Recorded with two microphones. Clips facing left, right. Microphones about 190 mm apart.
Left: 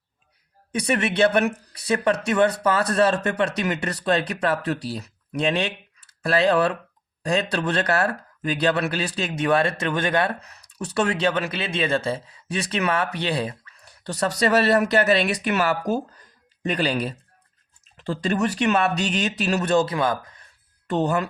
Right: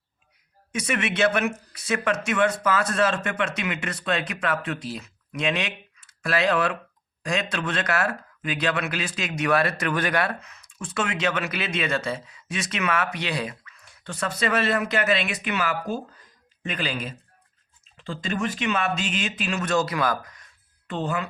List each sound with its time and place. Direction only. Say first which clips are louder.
0.7 s speech: left 4 dB; 35° left (ahead or behind)
20.8 s speech: left 6 dB; 40° left (ahead or behind)